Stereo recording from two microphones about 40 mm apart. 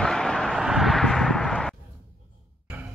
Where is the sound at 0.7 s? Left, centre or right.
Centre.